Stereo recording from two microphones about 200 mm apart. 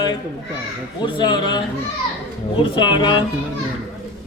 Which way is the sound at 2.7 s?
25° left (ahead or behind).